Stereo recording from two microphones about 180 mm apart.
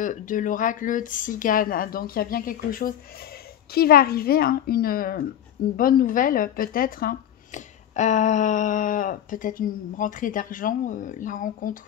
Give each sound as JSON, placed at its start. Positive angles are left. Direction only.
{"t": 0.0, "sound": "a woman's voice", "side_deg": 45}